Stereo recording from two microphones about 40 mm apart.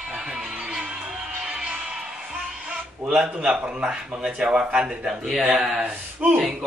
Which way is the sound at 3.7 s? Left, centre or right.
Right.